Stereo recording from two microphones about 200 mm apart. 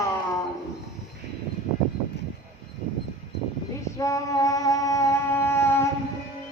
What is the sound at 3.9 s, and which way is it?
Female singing, 15° left (ahead or behind).